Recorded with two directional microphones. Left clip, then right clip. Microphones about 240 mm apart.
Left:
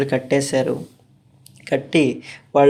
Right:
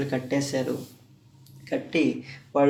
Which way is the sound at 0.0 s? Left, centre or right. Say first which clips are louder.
Left 8 dB; left.